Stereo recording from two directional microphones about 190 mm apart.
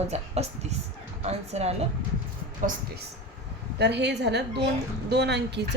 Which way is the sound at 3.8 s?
65° right (ahead or behind).